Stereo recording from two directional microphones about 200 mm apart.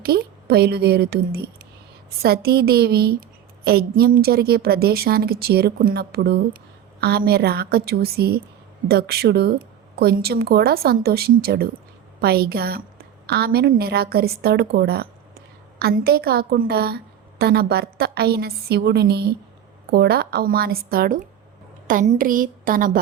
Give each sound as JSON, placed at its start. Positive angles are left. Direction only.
{"t": 0.0, "sound": "a woman's voice", "side_deg": -50}